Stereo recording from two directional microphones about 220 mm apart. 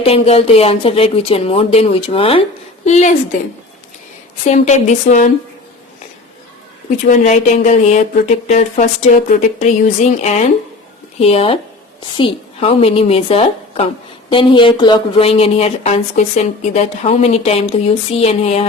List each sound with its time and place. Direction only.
0.0 s a woman's voice: 25° left (ahead or behind)
4.4 s speech: 35° left (ahead or behind)
7.1 s a woman's voice: 30° left (ahead or behind)